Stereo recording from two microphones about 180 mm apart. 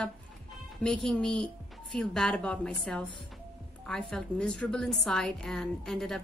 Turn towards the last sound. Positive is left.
turn(degrees=0)  # may be behind; listen again after turning